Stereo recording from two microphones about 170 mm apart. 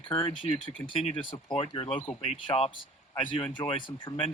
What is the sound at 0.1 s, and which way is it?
Speech, 30° left (ahead or behind).